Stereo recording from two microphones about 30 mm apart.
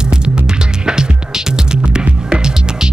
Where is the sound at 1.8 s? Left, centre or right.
Right.